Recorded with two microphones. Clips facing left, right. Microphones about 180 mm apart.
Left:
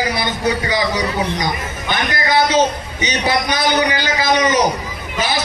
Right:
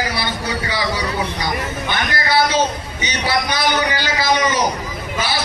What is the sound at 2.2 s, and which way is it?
A man's voice, 15° left (ahead or behind).